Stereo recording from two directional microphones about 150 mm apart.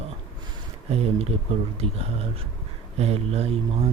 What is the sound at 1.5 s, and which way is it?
Speech, 40° right (ahead or behind).